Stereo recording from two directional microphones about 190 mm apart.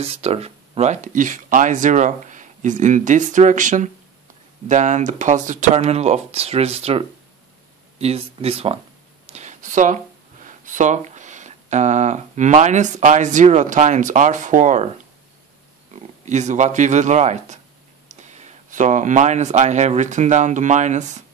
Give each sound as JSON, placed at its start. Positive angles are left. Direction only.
{"t": 0.0, "sound": "speech", "side_deg": -30}
{"t": 9.3, "sound": "a sound", "side_deg": -40}
{"t": 10.4, "sound": "speech", "side_deg": -40}
{"t": 15.9, "sound": "speech", "side_deg": -40}